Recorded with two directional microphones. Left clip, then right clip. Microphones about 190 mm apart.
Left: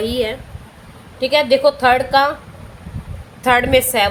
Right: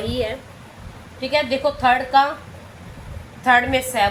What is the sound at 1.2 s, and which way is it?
A woman's voice, 65° left (ahead or behind).